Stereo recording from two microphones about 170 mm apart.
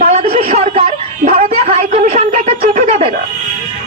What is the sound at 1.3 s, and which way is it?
Speech, 55° right (ahead or behind).